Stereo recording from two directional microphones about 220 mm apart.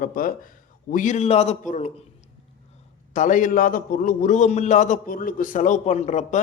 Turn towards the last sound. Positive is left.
turn(degrees=30)  # may be behind; listen again after turning